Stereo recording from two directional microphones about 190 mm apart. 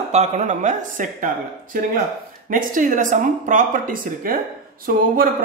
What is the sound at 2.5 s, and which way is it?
Speech, 45° right (ahead or behind).